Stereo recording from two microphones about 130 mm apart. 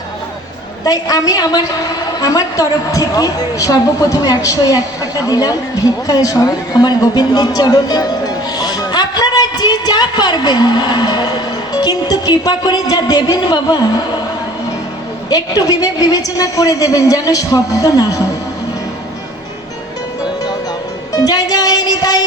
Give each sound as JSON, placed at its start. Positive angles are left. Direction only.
{"t": 0.9, "sound": "a woman's voice", "side_deg": 30}
{"t": 15.3, "sound": "a woman's voice", "side_deg": 30}
{"t": 21.1, "sound": "music", "side_deg": 30}